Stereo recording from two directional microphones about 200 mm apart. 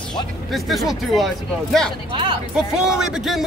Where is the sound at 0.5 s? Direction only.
Centre (ahead or behind).